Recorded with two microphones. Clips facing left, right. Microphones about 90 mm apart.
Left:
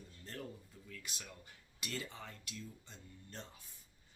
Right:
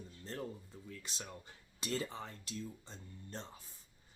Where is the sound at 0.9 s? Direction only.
30° right (ahead or behind).